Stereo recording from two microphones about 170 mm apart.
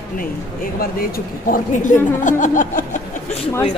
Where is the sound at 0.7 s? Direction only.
60° left (ahead or behind).